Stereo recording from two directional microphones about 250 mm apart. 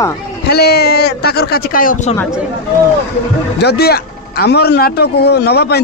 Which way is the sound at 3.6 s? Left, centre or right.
Left.